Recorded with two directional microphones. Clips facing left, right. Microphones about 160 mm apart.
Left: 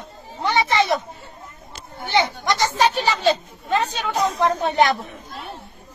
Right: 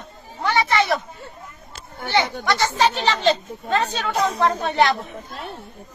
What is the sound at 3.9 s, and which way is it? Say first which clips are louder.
Speech: even; 10° left (ahead or behind).